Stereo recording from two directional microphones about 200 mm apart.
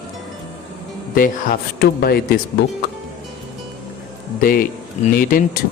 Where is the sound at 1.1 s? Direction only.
45° left (ahead or behind).